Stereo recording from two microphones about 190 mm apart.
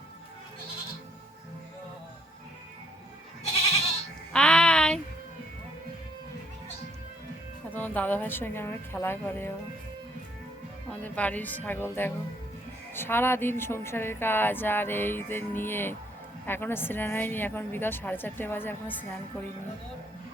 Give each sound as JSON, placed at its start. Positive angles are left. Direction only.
{"t": 4.3, "sound": "child singing", "side_deg": 5}
{"t": 7.7, "sound": "a woman's voice", "side_deg": 10}
{"t": 10.9, "sound": "a woman's voice", "side_deg": 10}